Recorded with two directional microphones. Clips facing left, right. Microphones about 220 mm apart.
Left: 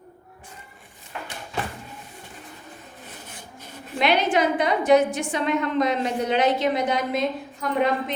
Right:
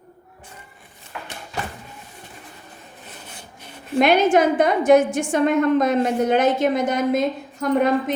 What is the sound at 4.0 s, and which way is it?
A woman's voice, 45° right (ahead or behind).